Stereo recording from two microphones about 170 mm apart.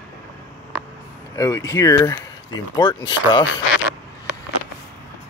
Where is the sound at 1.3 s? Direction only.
20° left (ahead or behind).